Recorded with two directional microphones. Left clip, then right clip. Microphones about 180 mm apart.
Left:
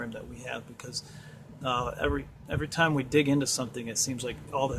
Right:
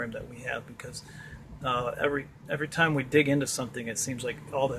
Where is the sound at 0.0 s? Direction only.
15° left (ahead or behind).